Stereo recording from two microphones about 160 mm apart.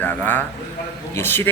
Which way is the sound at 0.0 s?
10° left (ahead or behind).